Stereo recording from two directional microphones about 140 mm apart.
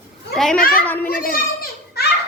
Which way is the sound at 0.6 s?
90° left.